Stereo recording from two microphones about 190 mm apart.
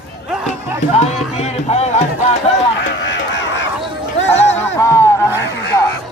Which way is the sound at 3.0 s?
70° left (ahead or behind).